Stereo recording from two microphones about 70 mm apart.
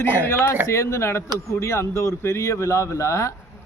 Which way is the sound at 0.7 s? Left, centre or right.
Left.